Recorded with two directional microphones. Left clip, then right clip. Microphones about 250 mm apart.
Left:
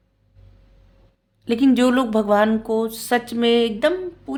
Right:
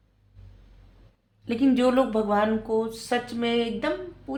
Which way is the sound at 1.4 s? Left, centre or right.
Left.